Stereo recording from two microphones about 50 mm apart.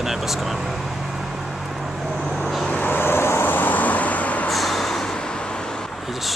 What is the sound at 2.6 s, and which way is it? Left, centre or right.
Vehicle, left.